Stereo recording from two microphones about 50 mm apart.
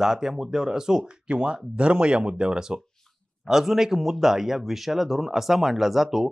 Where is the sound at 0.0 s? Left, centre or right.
Centre.